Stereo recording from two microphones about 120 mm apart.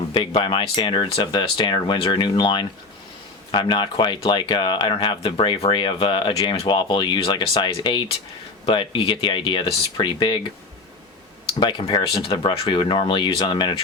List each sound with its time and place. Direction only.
0.1 s speech: 45° left (ahead or behind)
11.6 s speech: 40° left (ahead or behind)